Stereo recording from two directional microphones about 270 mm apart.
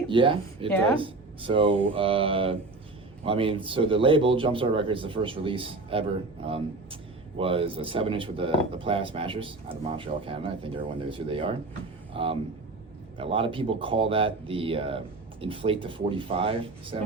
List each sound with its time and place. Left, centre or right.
0.1 s a man's voice: centre